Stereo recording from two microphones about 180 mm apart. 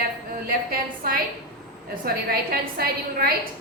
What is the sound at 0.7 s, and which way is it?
Speech, 55° right (ahead or behind).